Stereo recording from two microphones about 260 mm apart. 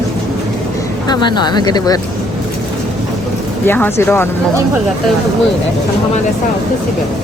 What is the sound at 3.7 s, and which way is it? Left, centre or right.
Speech, centre.